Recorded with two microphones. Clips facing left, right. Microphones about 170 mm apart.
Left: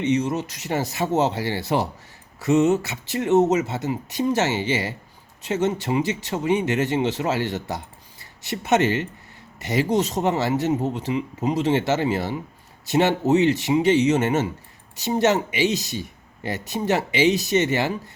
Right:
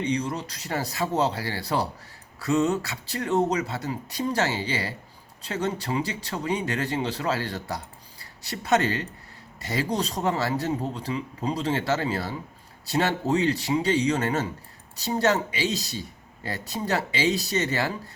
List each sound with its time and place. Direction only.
0.0 s speech: 25° left (ahead or behind)